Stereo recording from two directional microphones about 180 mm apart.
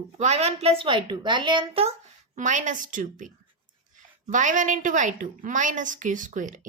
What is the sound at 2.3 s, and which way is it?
A woman's voice, 45° right (ahead or behind).